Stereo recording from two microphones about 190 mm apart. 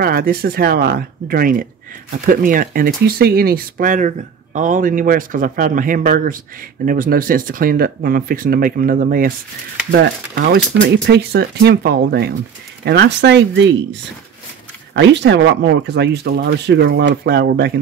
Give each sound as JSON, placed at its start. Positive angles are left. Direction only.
{"t": 0.0, "sound": "speech", "side_deg": -50}
{"t": 9.8, "sound": "speech", "side_deg": -60}
{"t": 15.0, "sound": "speech", "side_deg": -65}